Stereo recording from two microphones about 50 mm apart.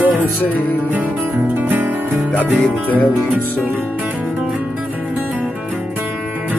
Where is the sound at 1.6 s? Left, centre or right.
Right.